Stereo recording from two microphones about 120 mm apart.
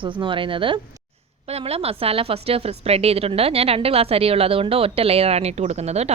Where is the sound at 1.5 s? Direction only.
60° right (ahead or behind).